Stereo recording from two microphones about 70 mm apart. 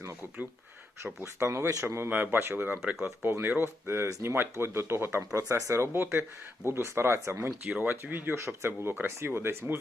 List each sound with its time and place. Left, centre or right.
1.2 s speech: right
2.0 s speech: right
5.3 s speech: right
7.7 s speech: right